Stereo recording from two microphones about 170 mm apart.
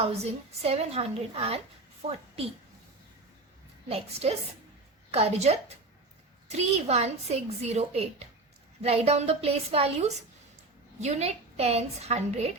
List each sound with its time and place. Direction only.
0.2 s a woman's voice: 40° right (ahead or behind)
3.8 s a woman's voice: 35° right (ahead or behind)